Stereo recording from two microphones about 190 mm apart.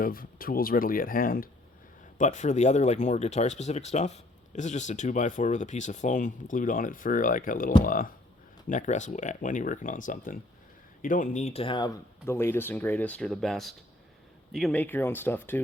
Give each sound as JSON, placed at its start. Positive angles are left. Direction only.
{"t": 0.0, "sound": "speech", "side_deg": 50}
{"t": 12.2, "sound": "speech", "side_deg": 15}